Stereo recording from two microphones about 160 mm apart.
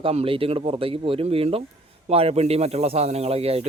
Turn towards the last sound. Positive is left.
turn(degrees=-40)  # may be behind; listen again after turning